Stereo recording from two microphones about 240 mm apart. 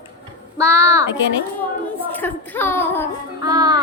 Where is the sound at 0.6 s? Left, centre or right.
Centre.